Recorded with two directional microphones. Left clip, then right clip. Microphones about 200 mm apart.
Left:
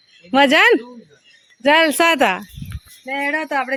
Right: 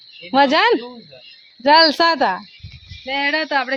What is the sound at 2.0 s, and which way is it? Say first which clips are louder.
Speech: left 1 dB; 20° left (ahead or behind).